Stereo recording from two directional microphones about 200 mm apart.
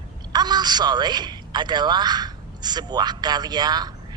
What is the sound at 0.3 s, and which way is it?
A man's voice, 20° right (ahead or behind).